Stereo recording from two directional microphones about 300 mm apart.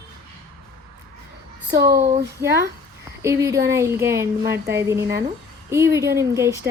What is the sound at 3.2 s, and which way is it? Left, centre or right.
Speech, centre.